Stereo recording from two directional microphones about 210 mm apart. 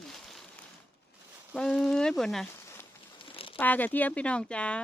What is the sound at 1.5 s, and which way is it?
Speech, centre (ahead or behind).